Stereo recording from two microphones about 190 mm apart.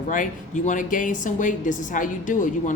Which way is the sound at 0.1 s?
40° left (ahead or behind).